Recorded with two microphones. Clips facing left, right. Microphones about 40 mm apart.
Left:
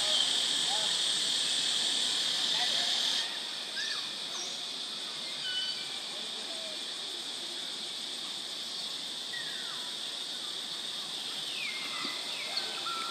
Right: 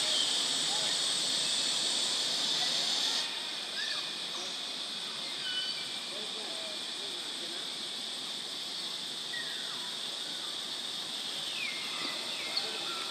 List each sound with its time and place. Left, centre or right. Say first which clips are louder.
0.0 s vehicle: left 2 dB; centre